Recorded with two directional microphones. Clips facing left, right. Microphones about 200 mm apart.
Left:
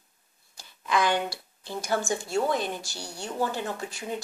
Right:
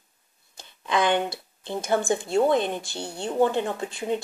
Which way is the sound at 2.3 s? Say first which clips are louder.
Right 6 dB; 25° right (ahead or behind).